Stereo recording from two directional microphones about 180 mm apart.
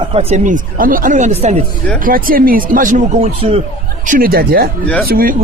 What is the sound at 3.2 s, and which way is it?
Speech, 35° right (ahead or behind).